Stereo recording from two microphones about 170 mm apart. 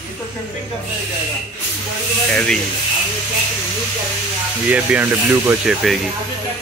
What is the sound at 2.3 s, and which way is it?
Speech, 5° left (ahead or behind).